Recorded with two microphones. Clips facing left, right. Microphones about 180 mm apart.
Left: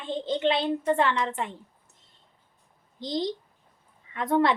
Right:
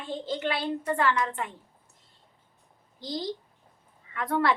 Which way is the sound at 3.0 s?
20° left (ahead or behind).